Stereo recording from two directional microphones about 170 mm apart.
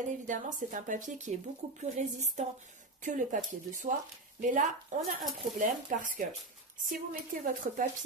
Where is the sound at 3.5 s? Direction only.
50° right (ahead or behind).